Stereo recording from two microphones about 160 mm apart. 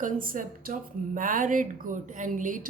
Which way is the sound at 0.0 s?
60° right (ahead or behind).